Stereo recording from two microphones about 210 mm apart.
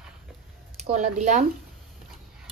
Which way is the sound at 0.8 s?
35° right (ahead or behind).